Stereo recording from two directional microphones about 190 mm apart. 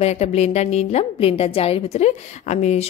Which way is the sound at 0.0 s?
35° left (ahead or behind).